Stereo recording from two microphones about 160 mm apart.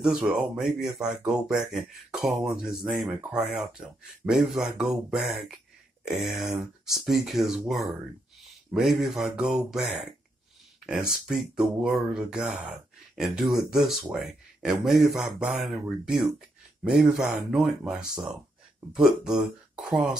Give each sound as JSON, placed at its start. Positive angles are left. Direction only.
{"t": 0.0, "sound": "speech", "side_deg": -5}